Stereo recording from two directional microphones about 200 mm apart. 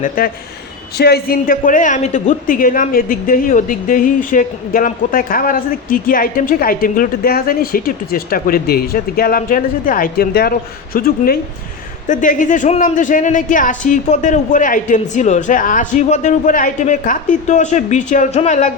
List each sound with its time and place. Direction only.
0.9 s a woman's voice: 50° left (ahead or behind)